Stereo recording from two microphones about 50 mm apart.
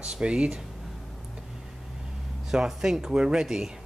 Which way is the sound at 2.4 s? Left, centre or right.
Centre.